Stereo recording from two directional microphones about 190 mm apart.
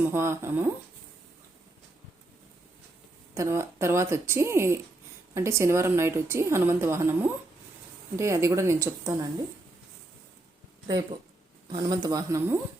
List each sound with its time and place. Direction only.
0.0 s a woman's voice: 15° right (ahead or behind)
3.3 s a woman's voice: 15° right (ahead or behind)
10.8 s speech: 20° right (ahead or behind)